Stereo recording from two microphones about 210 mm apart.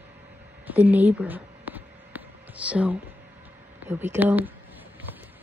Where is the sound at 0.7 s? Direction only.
5° right (ahead or behind).